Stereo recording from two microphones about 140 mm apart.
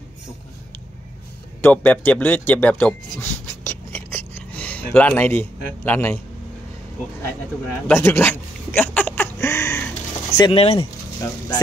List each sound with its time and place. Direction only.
1.6 s speech: 10° left (ahead or behind)
7.9 s a sound: 20° left (ahead or behind)
10.5 s speech: 45° left (ahead or behind)